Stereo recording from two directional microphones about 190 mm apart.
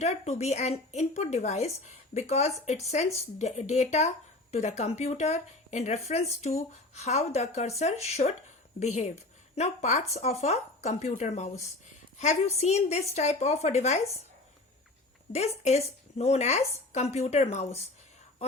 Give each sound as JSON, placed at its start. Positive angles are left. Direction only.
{"t": 0.0, "sound": "speech", "side_deg": 35}
{"t": 15.3, "sound": "speech", "side_deg": 35}